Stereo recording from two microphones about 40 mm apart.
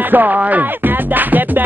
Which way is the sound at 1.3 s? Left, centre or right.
Right.